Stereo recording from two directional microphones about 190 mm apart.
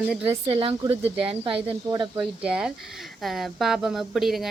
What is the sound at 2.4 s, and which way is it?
A woman's voice, 5° right (ahead or behind).